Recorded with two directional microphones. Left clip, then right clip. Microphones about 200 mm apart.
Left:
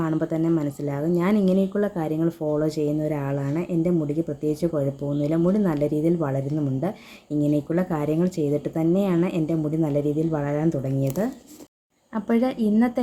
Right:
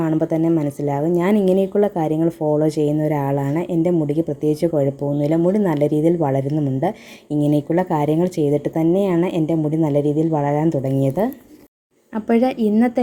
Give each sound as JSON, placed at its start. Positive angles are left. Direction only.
{"t": 0.0, "sound": "speech", "side_deg": -15}